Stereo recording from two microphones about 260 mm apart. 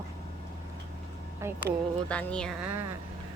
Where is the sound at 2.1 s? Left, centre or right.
Centre.